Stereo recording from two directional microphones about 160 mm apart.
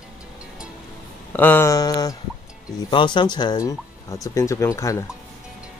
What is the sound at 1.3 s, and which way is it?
Speech, 10° left (ahead or behind).